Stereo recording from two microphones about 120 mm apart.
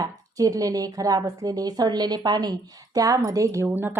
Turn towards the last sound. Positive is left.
turn(degrees=-15)  # may be behind; listen again after turning